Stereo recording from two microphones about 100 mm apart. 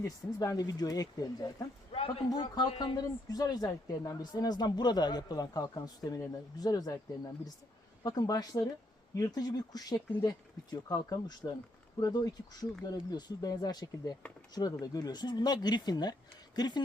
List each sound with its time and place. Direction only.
0.3 s a woman's voice: 40° left (ahead or behind)
1.9 s a sound: 75° left (ahead or behind)
2.4 s a woman's voice: 50° left (ahead or behind)
8.0 s a woman's voice: 40° left (ahead or behind)